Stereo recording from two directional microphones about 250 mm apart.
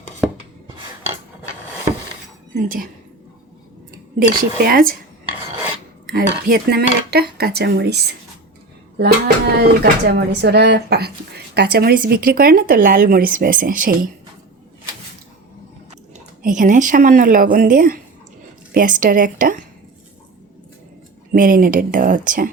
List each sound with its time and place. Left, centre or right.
2.6 s speech: right
4.2 s speech: right
6.1 s speech: right
9.0 s speech: right
16.1 s speech: right
21.3 s speech: right